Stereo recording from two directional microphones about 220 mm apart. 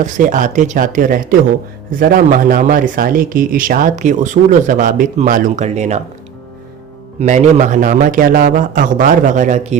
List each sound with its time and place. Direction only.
0.0 s speech: 35° right (ahead or behind)
7.2 s speech: 35° right (ahead or behind)